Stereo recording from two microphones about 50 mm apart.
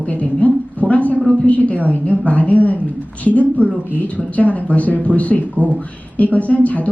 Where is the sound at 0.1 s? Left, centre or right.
Left.